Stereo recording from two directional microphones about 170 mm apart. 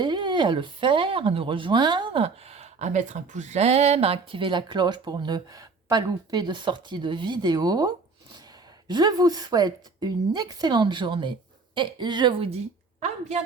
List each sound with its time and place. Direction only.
0.0 s speech: 25° right (ahead or behind)
13.0 s a woman's voice: 40° right (ahead or behind)